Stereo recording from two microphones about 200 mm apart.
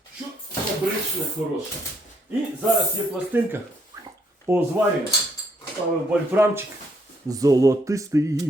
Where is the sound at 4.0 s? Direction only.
15° right (ahead or behind).